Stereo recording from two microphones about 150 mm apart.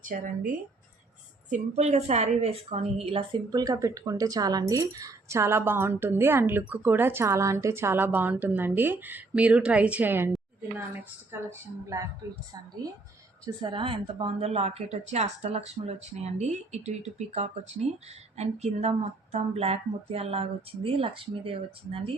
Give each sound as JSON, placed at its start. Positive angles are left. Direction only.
{"t": 0.0, "sound": "a woman's voice", "side_deg": -60}
{"t": 13.6, "sound": "speech", "side_deg": -35}